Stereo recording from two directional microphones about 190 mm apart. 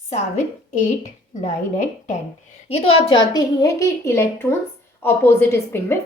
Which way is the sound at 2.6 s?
30° left (ahead or behind).